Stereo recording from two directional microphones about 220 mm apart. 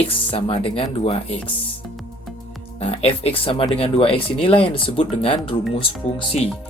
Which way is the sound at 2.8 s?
25° left (ahead or behind).